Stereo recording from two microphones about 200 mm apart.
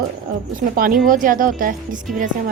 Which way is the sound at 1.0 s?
45° right (ahead or behind).